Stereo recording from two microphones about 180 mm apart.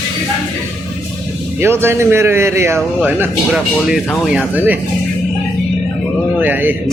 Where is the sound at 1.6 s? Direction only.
15° right (ahead or behind).